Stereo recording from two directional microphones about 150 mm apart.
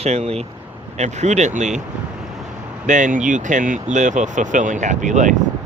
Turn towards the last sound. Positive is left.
turn(degrees=-55)  # may be behind; listen again after turning